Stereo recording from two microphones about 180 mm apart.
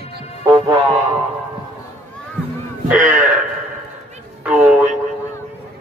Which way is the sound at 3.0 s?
45° right (ahead or behind).